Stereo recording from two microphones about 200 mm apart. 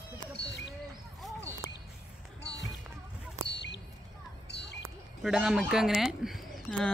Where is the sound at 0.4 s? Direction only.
60° left (ahead or behind).